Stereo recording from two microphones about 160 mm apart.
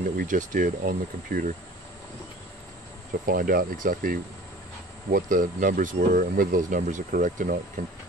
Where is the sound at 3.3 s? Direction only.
65° right (ahead or behind).